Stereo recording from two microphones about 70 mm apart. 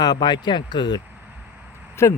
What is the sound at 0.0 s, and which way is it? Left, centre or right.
Speech, left.